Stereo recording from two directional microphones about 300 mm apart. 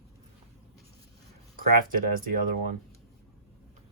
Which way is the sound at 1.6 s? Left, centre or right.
Right.